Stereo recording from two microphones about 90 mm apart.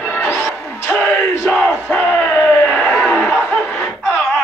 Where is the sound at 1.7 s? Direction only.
25° left (ahead or behind).